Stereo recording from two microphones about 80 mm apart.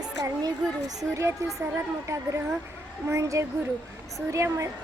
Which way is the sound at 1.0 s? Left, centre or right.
Right.